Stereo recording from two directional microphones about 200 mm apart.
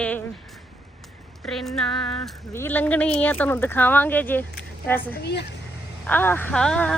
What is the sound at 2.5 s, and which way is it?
Speech, 10° left (ahead or behind).